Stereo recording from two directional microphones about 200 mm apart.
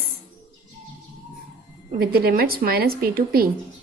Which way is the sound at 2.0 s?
50° right (ahead or behind).